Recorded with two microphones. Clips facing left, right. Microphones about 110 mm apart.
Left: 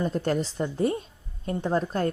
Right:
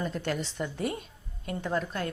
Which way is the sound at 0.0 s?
40° left (ahead or behind).